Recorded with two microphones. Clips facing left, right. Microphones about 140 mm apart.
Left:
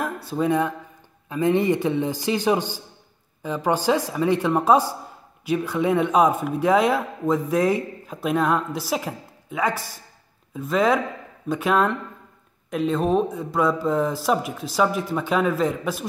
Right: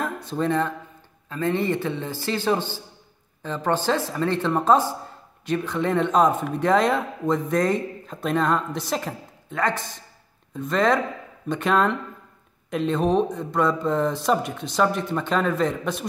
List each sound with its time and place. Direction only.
0.0 s speech: 5° left (ahead or behind)